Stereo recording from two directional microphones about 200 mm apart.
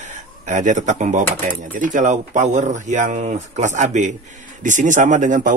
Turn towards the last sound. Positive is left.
turn(degrees=-40)  # may be behind; listen again after turning